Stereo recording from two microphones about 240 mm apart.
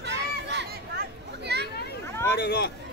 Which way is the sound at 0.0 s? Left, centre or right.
Right.